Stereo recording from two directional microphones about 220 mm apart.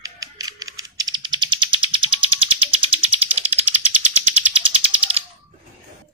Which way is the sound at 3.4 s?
25° right (ahead or behind).